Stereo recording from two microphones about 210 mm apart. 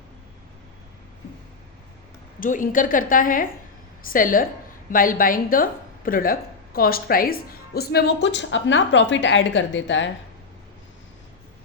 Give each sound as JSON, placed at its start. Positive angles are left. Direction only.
{"t": 2.4, "sound": "a woman's voice", "side_deg": 40}